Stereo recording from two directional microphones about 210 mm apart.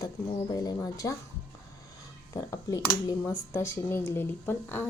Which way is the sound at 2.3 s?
15° left (ahead or behind).